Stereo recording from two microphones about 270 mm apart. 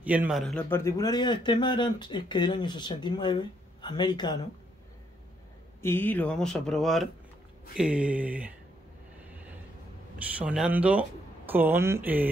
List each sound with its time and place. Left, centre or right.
0.0 s a man's voice: centre
5.8 s speech: centre
10.4 s speech: centre